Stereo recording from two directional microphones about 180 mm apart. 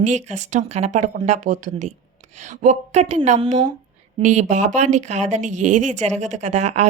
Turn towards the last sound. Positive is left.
turn(degrees=-40)  # may be behind; listen again after turning